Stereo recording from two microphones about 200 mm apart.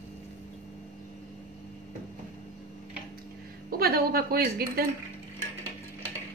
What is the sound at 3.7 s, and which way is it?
A woman's voice, 50° right (ahead or behind).